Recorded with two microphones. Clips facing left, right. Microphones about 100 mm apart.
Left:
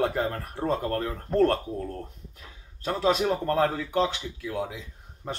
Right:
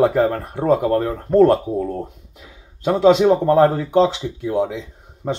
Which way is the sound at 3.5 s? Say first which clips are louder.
Right 10 dB; 55° right (ahead or behind).